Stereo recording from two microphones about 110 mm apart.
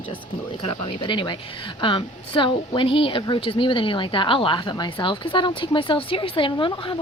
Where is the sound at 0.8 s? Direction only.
50° left (ahead or behind).